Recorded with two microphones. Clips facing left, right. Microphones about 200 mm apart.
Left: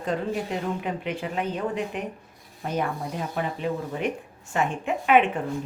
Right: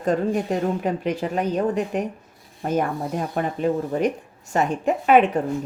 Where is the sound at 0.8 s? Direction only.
40° right (ahead or behind).